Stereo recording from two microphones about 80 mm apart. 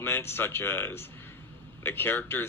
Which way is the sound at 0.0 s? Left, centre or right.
Left.